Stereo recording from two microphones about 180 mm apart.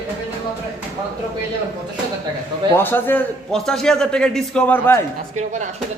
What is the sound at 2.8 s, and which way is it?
A man's voice, 10° left (ahead or behind).